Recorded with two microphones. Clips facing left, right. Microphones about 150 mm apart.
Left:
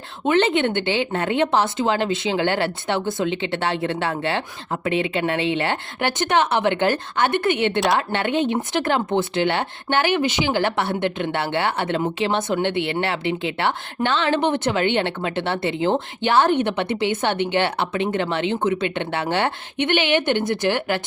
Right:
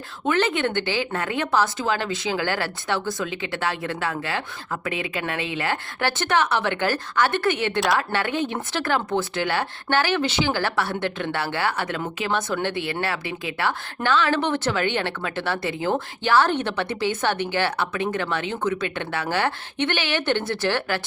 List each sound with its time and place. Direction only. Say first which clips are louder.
0.3 s speech: left 4 dB; 25° left (ahead or behind)